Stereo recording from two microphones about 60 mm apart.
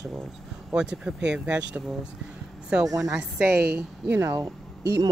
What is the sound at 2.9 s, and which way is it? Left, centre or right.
Speech, right.